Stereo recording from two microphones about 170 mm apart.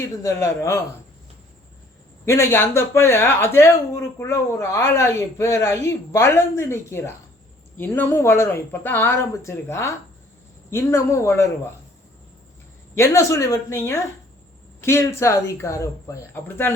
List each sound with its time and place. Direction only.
0.2 s speech: 15° left (ahead or behind)
2.2 s speech: 15° left (ahead or behind)
13.0 s speech: 20° left (ahead or behind)